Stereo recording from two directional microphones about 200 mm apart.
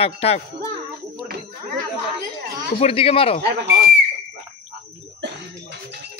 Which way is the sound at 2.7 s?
30° left (ahead or behind).